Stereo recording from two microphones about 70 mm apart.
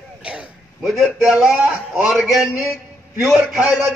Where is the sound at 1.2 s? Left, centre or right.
Centre.